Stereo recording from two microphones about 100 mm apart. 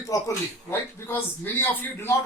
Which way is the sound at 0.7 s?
20° left (ahead or behind).